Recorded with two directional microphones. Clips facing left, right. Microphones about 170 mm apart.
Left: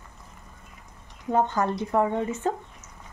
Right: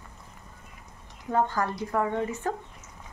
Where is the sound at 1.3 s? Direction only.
20° left (ahead or behind).